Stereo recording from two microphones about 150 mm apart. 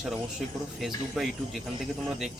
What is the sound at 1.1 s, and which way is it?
Speech, centre (ahead or behind).